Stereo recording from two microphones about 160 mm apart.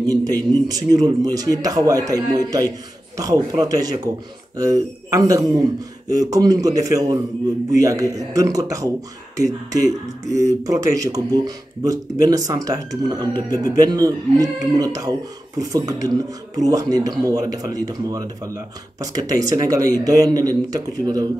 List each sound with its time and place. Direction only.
0.0 s speech: 25° right (ahead or behind)